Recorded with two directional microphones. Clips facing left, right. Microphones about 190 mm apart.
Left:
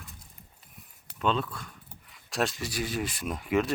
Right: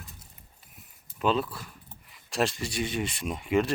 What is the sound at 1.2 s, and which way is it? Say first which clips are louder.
Speech: right 2 dB; 5° right (ahead or behind).